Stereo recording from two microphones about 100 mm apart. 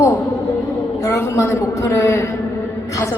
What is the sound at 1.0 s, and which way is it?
A woman's voice, 30° left (ahead or behind).